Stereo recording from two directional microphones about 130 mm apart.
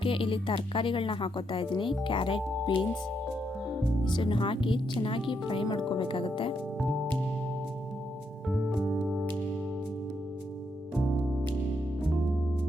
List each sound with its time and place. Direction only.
0.0 s speech: 45° left (ahead or behind)
4.0 s speech: 40° left (ahead or behind)
8.4 s music: centre (ahead or behind)
10.9 s music: centre (ahead or behind)